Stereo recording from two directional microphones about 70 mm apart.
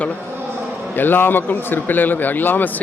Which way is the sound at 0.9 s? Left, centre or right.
Left.